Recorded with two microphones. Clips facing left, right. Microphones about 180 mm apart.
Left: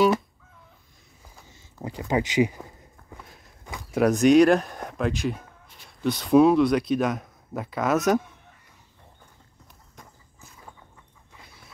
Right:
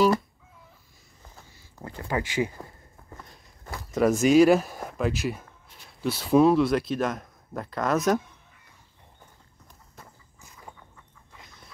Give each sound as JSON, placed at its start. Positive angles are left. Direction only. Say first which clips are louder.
{"t": 1.5, "sound": "speech", "louder": "left 5 dB", "side_deg": 20}
{"t": 3.1, "sound": "walk", "louder": "left 1 dB", "side_deg": 5}
{"t": 3.9, "sound": "speech", "louder": "left 2 dB", "side_deg": 0}